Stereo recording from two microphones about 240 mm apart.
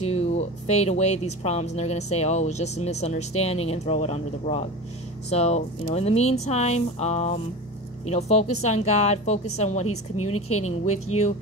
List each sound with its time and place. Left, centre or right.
0.0 s speech: left
9.8 s a woman's voice: left